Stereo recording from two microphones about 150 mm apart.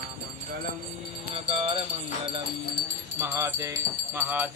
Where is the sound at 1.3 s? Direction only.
40° right (ahead or behind).